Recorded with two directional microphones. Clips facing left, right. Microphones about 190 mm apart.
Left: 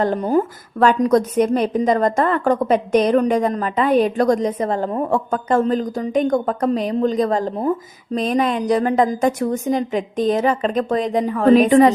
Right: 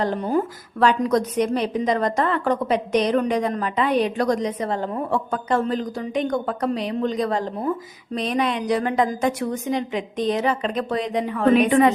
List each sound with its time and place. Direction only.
0.0 s a woman's voice: 45° left (ahead or behind)